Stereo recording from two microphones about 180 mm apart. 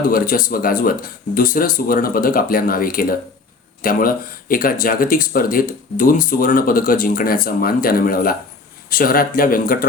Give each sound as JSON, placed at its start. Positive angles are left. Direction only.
{"t": 0.1, "sound": "speech", "side_deg": 50}